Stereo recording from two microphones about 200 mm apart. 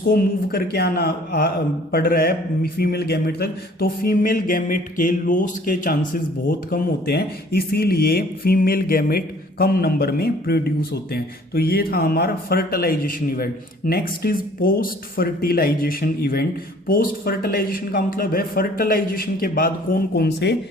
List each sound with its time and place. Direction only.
0.0 s speech: 45° left (ahead or behind)